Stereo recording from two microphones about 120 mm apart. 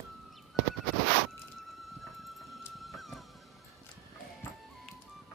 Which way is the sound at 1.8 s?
Centre (ahead or behind).